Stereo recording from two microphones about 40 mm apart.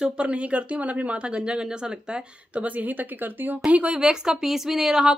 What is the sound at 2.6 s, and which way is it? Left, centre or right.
Speech, right.